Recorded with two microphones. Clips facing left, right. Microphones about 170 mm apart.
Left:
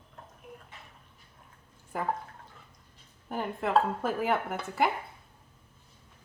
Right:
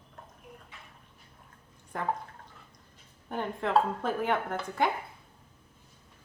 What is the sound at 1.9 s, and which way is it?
Speech, 5° left (ahead or behind).